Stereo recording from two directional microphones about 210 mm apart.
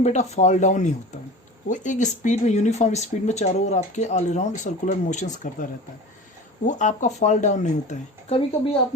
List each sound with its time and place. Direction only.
0.0 s speech: 35° left (ahead or behind)
6.7 s speech: 35° left (ahead or behind)